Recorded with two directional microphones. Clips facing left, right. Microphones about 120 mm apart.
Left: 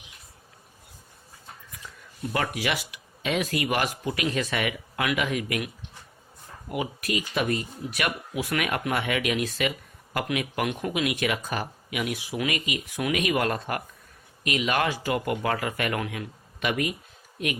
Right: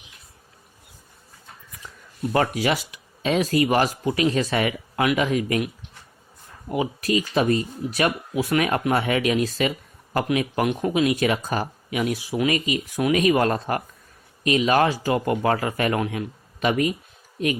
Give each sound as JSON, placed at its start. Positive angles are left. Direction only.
{"t": 2.3, "sound": "speech", "side_deg": -30}
{"t": 6.7, "sound": "speech", "side_deg": -30}